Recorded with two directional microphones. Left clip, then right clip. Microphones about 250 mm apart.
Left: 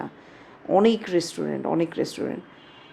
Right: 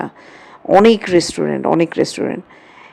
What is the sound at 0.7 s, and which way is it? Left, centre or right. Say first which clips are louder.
Speech: right 10 dB; right.